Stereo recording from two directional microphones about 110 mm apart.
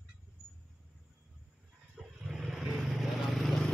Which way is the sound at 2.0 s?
5° right (ahead or behind).